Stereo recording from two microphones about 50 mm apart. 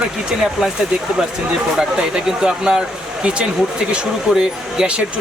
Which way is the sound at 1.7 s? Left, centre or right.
Centre.